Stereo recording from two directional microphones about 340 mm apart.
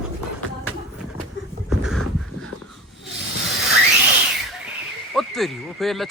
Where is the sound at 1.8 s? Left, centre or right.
Centre.